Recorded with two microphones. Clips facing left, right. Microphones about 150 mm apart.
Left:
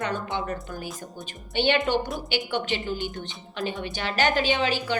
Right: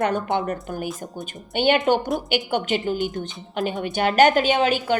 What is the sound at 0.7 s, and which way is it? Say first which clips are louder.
A woman's voice: right 6 dB; 45° right (ahead or behind).